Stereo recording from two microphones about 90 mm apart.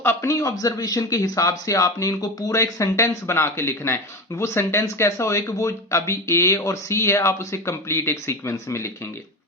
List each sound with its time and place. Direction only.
0.0 s speech: 30° left (ahead or behind)